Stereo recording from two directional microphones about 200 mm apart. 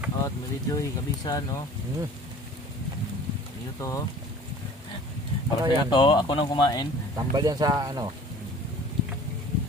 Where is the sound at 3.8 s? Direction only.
15° left (ahead or behind).